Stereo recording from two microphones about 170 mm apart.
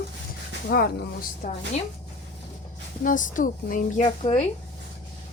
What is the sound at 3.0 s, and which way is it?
Speech, 50° left (ahead or behind).